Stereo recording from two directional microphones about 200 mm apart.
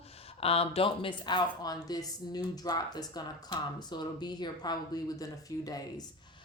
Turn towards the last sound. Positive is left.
turn(degrees=20)  # may be behind; listen again after turning